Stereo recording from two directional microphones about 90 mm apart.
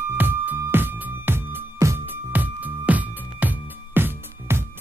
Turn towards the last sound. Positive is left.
turn(degrees=-25)  # may be behind; listen again after turning